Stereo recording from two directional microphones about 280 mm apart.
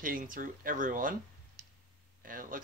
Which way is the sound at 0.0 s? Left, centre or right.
Right.